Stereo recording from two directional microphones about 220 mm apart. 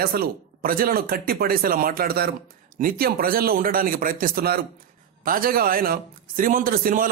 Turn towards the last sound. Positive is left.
turn(degrees=-40)  # may be behind; listen again after turning